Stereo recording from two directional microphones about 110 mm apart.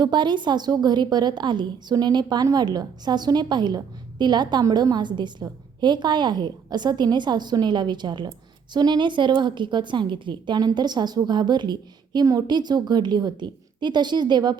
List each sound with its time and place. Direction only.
0.0 s a woman's voice: 45° right (ahead or behind)